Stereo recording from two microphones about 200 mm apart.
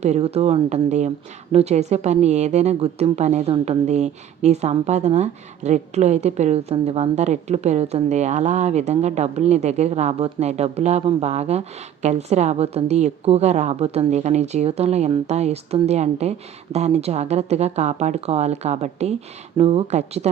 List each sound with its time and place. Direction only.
0.0 s a woman's voice: 35° right (ahead or behind)